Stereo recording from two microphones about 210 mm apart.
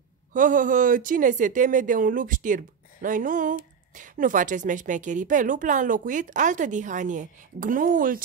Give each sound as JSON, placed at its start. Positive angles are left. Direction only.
{"t": 0.3, "sound": "a woman's voice", "side_deg": -40}